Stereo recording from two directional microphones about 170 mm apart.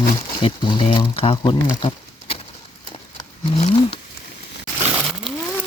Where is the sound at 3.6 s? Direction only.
35° left (ahead or behind).